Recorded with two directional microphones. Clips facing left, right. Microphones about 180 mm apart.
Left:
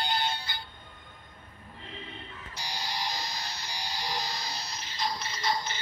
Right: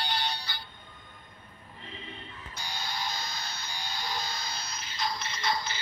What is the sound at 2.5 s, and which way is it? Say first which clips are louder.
Music: left 1 dB; 35° left (ahead or behind).